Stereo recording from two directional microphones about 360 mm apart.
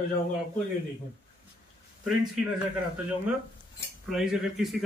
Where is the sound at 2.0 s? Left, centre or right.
Centre.